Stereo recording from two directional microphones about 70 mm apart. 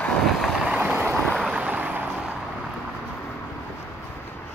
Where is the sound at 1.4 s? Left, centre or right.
Centre.